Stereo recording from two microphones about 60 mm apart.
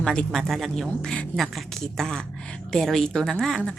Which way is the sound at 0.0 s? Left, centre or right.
Centre.